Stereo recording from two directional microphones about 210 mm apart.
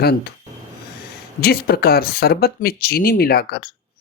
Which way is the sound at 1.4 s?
50° left (ahead or behind).